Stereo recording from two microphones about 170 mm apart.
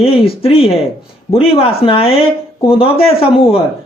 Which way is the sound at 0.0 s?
35° left (ahead or behind).